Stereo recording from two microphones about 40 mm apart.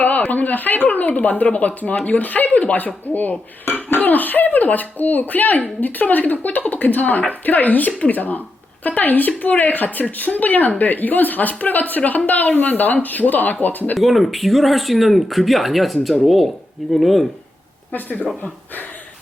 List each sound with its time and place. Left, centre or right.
0.0 s speech: left
13.9 s speech: centre
17.9 s speech: left